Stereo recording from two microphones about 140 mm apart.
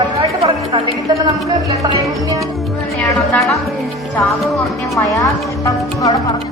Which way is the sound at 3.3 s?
Centre (ahead or behind).